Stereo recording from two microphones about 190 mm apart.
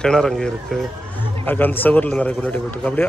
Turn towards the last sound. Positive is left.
turn(degrees=10)  # may be behind; listen again after turning